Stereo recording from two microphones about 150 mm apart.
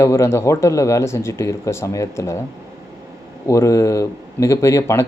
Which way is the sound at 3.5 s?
20° left (ahead or behind).